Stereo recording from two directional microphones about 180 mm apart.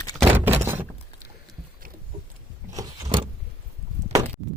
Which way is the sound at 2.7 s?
20° right (ahead or behind).